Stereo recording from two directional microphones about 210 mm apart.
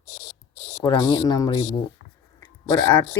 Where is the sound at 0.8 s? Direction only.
20° left (ahead or behind).